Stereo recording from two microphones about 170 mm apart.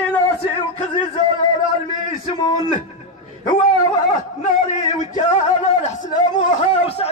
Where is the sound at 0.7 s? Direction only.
35° left (ahead or behind).